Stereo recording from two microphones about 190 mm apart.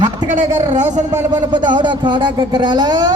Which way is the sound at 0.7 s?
40° right (ahead or behind).